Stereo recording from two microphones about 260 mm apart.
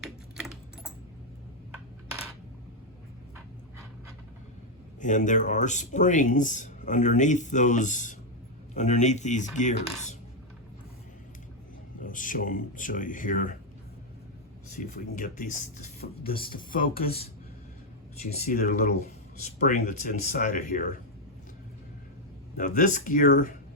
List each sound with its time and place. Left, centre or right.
0.0 s typing: centre
4.9 s speech: left
11.9 s speech: left
14.7 s speech: left
18.4 s speech: left
22.5 s speech: left